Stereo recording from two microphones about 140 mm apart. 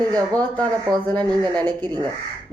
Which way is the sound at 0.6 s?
30° right (ahead or behind).